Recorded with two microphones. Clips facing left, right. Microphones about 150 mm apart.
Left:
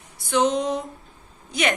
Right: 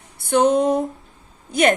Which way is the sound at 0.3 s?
55° right (ahead or behind).